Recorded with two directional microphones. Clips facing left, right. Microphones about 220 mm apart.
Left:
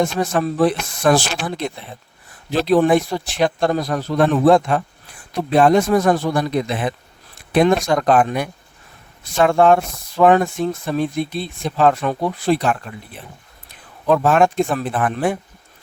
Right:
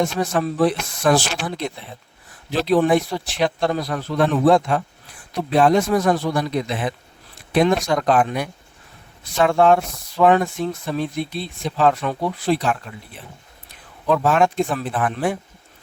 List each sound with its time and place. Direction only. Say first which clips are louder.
0.0 s speech: left 2 dB; 50° left (ahead or behind)
14.1 s speech: left 3 dB; 50° left (ahead or behind)